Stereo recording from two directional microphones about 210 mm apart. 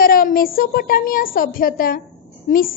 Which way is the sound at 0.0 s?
45° left (ahead or behind).